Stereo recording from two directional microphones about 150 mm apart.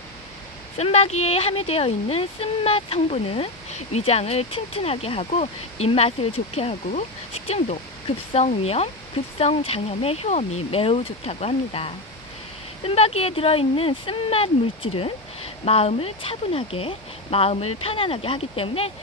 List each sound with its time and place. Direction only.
0.7 s speech: 45° left (ahead or behind)